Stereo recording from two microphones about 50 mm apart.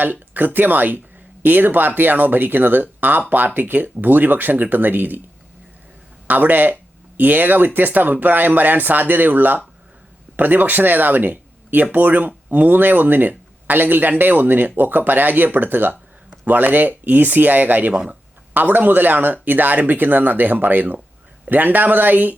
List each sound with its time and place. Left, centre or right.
0.0 s speech: right
6.2 s speech: right